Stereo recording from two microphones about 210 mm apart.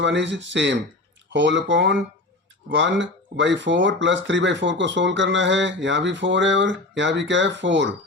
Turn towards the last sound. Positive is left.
turn(degrees=-60)  # may be behind; listen again after turning